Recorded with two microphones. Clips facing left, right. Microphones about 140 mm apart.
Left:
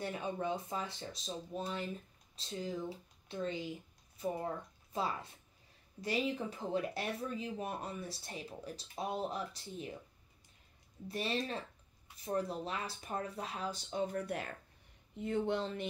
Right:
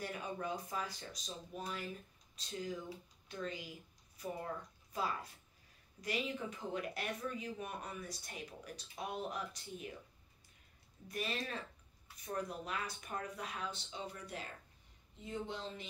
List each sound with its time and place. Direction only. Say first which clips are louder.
0.0 s speech: left 4 dB; 25° left (ahead or behind)
4.9 s speech: left 2 dB; 25° left (ahead or behind)
11.1 s speech: left 4 dB; 30° left (ahead or behind)
13.8 s speech: left 10 dB; 55° left (ahead or behind)